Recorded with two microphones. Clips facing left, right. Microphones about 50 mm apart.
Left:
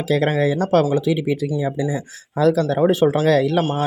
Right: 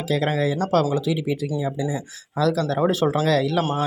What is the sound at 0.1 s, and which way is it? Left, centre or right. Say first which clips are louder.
Speech: left 4 dB; left.